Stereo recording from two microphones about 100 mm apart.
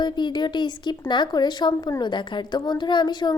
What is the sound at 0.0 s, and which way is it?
A woman's voice, 50° left (ahead or behind).